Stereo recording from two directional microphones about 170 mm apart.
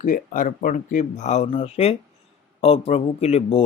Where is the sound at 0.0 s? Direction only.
50° left (ahead or behind).